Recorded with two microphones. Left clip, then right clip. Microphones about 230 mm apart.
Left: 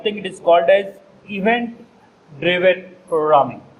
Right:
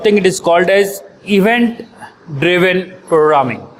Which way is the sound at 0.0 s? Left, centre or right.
Right.